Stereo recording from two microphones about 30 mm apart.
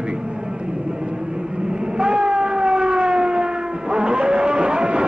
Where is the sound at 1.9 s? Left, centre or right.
Right.